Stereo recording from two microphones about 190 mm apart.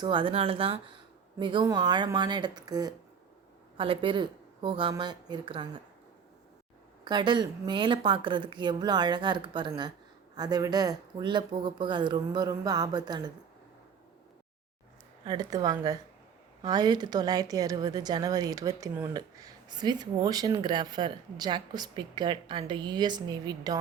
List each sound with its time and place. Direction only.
0.0 s a woman's voice: 25° right (ahead or behind)
7.0 s a woman's voice: 25° right (ahead or behind)
15.2 s a woman's voice: 20° right (ahead or behind)